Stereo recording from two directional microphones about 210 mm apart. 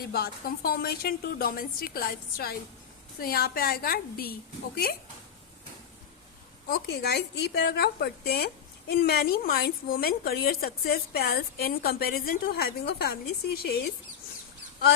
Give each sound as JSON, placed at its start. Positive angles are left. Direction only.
{"t": 0.1, "sound": "a woman's voice", "side_deg": 45}
{"t": 6.7, "sound": "a woman's voice", "side_deg": 50}